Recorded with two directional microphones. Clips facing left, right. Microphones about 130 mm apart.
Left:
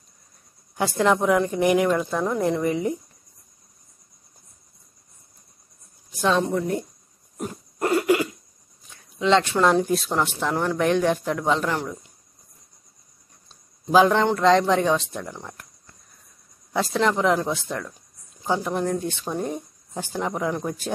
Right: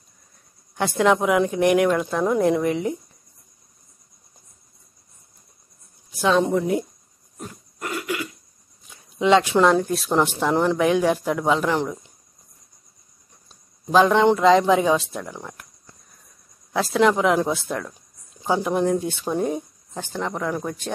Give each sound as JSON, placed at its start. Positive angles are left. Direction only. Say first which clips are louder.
{"t": 0.7, "sound": "a woman's voice", "louder": "right 2 dB", "side_deg": 0}
{"t": 6.4, "sound": "speech", "louder": "right 3 dB", "side_deg": -10}
{"t": 7.8, "sound": "a sound", "louder": "left 8 dB", "side_deg": 35}
{"t": 9.2, "sound": "speech", "louder": "right 3 dB", "side_deg": -10}
{"t": 9.7, "sound": "a woman's voice", "louder": "right 1 dB", "side_deg": 5}
{"t": 10.0, "sound": "speech", "louder": "right 4 dB", "side_deg": -15}
{"t": 10.8, "sound": "speech", "louder": "right 2 dB", "side_deg": -5}
{"t": 13.5, "sound": "a sound", "louder": "left 1 dB", "side_deg": 0}
{"t": 14.6, "sound": "speech", "louder": "right 2 dB", "side_deg": -5}
{"t": 16.7, "sound": "a woman's voice", "louder": "right 3 dB", "side_deg": -5}
{"t": 19.9, "sound": "a woman's voice", "louder": "left 1 dB", "side_deg": 10}